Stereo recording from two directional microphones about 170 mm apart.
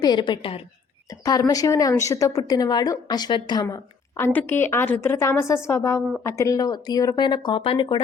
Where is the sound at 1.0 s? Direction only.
20° left (ahead or behind).